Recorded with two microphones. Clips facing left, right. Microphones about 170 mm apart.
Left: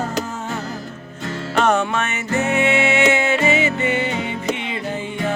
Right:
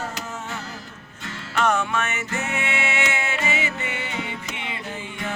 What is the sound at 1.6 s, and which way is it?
Music, 25° left (ahead or behind).